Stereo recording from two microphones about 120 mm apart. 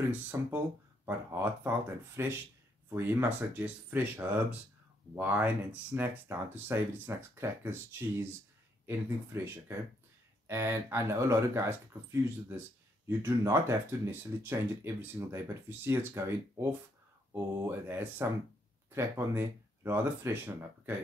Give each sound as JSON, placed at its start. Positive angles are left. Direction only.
{"t": 0.1, "sound": "speech", "side_deg": -15}
{"t": 8.8, "sound": "speech", "side_deg": -20}